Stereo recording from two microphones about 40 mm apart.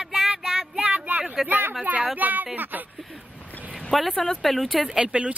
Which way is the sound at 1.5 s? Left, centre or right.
Right.